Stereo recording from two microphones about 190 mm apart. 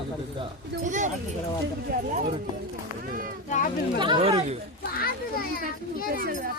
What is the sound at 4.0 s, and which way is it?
Speech, 25° right (ahead or behind).